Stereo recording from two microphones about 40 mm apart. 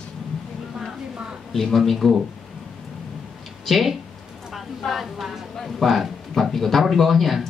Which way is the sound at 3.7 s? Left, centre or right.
Centre.